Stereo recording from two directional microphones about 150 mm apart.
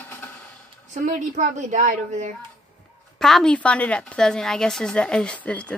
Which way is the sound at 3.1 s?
5° left (ahead or behind).